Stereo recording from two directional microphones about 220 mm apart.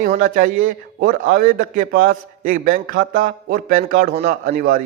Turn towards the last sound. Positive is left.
turn(degrees=-40)  # may be behind; listen again after turning